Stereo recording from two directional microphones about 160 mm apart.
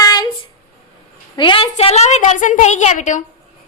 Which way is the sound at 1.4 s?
30° left (ahead or behind).